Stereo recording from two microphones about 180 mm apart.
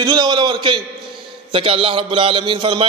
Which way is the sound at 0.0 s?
25° right (ahead or behind).